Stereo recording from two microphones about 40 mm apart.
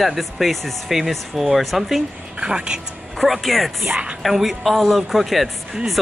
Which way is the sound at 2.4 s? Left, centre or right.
Right.